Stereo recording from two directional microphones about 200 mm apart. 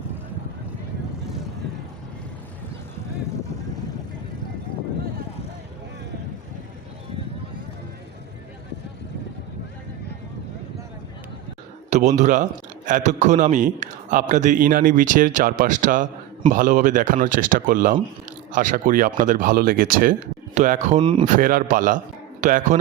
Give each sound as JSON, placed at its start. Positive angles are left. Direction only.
{"t": 11.9, "sound": "a man's voice", "side_deg": -35}
{"t": 21.0, "sound": "a man's voice", "side_deg": -25}
{"t": 21.2, "sound": "a man's voice", "side_deg": -40}